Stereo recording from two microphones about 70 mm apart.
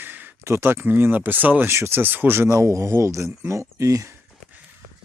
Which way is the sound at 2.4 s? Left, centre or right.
Right.